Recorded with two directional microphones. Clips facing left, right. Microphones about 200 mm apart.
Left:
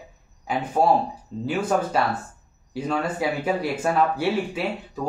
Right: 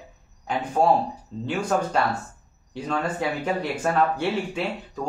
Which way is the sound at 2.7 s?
5° left (ahead or behind).